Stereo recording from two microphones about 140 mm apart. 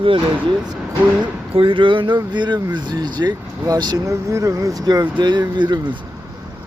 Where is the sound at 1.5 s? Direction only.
40° right (ahead or behind).